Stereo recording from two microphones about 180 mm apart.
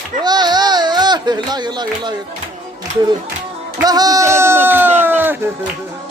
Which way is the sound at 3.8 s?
20° right (ahead or behind).